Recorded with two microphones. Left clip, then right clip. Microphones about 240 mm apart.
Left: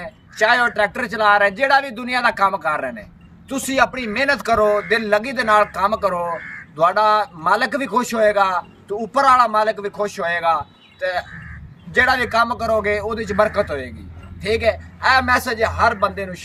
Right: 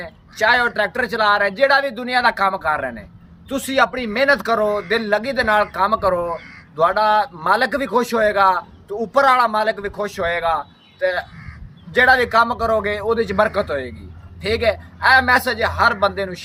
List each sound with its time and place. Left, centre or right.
0.0 s speech: centre
6.7 s a sound: centre
7.0 s a man's voice: right
7.4 s speech: centre
11.9 s speech: centre